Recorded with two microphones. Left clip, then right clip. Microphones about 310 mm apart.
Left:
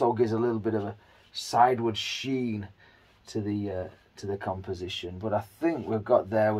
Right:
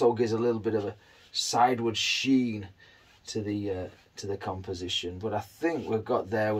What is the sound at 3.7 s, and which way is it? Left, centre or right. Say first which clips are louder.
Speech: left 2 dB; centre.